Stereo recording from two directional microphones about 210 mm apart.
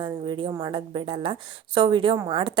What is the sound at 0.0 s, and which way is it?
A woman's voice, 25° right (ahead or behind).